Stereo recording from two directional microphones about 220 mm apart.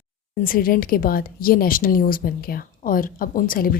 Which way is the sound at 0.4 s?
40° left (ahead or behind).